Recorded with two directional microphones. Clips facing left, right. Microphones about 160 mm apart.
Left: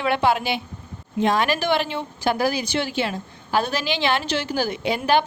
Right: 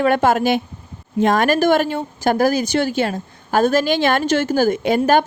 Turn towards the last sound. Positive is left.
turn(degrees=-45)  # may be behind; listen again after turning